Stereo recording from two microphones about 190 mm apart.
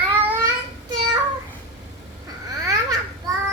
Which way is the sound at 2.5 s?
20° right (ahead or behind).